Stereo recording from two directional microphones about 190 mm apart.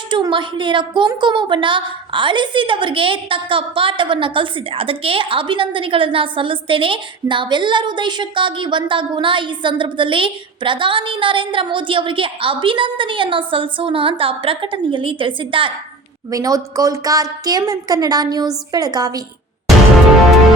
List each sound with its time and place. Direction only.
0.1 s a woman's voice: 25° right (ahead or behind)